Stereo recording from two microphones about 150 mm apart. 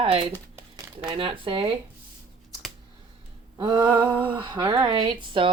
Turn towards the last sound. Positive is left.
turn(degrees=-35)  # may be behind; listen again after turning